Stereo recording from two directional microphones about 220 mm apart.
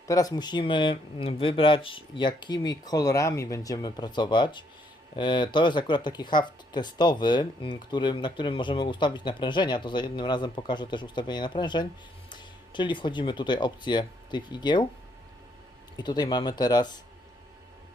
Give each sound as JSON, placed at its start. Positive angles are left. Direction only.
{"t": 0.1, "sound": "speech", "side_deg": 15}
{"t": 16.0, "sound": "speech", "side_deg": 20}